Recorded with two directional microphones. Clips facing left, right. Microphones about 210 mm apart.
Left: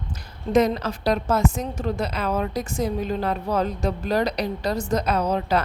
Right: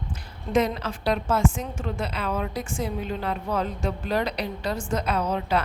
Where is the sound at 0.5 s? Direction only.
40° left (ahead or behind).